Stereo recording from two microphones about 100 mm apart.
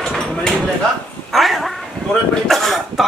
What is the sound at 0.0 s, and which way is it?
Livestock, 5° left (ahead or behind).